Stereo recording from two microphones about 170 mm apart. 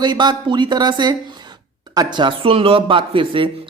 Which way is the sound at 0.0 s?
25° right (ahead or behind).